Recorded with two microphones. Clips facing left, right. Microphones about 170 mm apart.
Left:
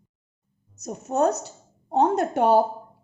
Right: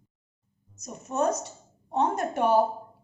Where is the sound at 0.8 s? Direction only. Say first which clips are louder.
Left 5 dB; 70° left (ahead or behind).